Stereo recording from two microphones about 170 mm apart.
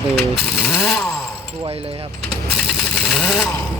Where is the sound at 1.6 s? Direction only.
35° right (ahead or behind).